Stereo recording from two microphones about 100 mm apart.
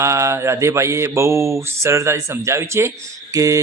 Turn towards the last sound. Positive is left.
turn(degrees=-35)  # may be behind; listen again after turning